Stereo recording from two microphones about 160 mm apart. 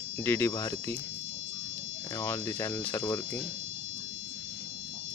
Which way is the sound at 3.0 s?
25° left (ahead or behind).